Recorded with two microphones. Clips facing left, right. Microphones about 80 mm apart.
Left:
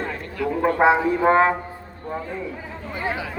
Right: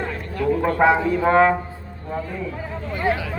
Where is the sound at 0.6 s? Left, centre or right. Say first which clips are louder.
Left 1 dB; centre.